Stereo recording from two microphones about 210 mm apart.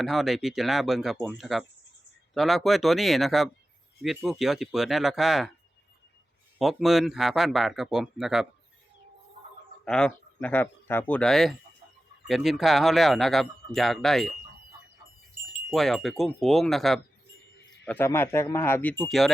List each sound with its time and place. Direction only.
0.0 s speech: centre (ahead or behind)
6.6 s speech: centre (ahead or behind)
9.8 s speech: 5° left (ahead or behind)
15.7 s speech: centre (ahead or behind)